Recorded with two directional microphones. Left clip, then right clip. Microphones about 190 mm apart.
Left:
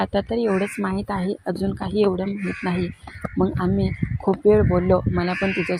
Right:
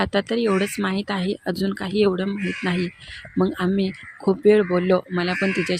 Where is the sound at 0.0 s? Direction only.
20° right (ahead or behind).